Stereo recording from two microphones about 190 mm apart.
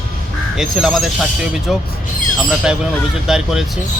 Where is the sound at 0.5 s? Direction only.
Centre (ahead or behind).